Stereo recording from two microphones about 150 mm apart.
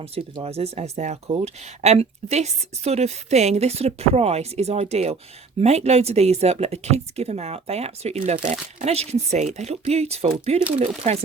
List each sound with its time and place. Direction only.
0.0 s a woman's voice: 40° right (ahead or behind)